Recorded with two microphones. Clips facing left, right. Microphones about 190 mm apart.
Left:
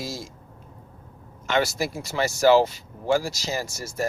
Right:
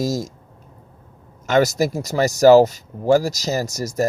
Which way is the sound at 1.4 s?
40° right (ahead or behind).